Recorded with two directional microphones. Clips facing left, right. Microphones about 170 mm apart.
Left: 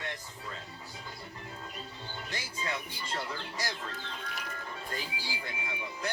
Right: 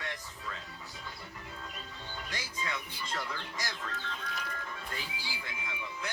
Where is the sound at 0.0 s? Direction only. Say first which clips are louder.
Left 1 dB; 30° left (ahead or behind).